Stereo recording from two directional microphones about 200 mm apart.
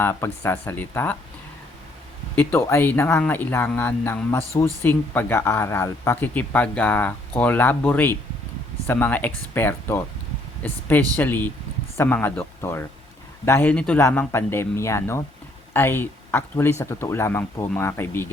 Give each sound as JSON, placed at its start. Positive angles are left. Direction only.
{"t": 0.0, "sound": "speech", "side_deg": 10}
{"t": 2.3, "sound": "speech", "side_deg": 10}